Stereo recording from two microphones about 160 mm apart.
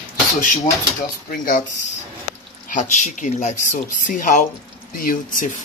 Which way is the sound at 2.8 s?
50° left (ahead or behind).